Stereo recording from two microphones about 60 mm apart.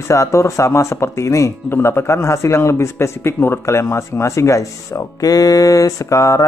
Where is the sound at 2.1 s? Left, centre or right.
Left.